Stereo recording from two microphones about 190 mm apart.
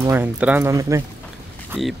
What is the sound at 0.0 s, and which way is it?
Speech, 10° right (ahead or behind).